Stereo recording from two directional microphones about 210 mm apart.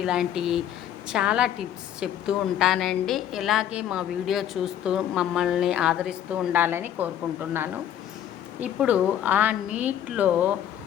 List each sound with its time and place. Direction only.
0.0 s a woman's voice: centre (ahead or behind)
8.6 s a woman's voice: 5° right (ahead or behind)